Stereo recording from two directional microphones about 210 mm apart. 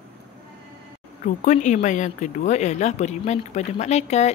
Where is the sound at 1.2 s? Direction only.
35° left (ahead or behind).